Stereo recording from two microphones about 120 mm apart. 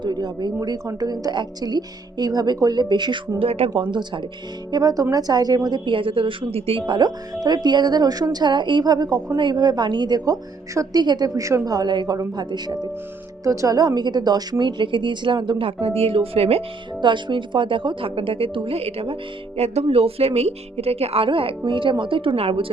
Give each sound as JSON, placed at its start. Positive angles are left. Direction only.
{"t": 0.0, "sound": "a woman's voice", "side_deg": -35}
{"t": 4.7, "sound": "a woman's voice", "side_deg": -35}
{"t": 13.4, "sound": "a woman's voice", "side_deg": -25}
{"t": 17.0, "sound": "a woman's voice", "side_deg": -40}